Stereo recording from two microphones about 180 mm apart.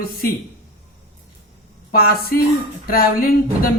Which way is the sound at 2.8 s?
55° left (ahead or behind).